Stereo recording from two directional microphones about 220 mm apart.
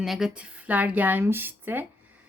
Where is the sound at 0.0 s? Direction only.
Centre (ahead or behind).